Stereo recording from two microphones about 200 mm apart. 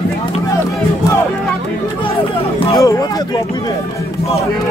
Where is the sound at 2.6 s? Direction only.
15° left (ahead or behind).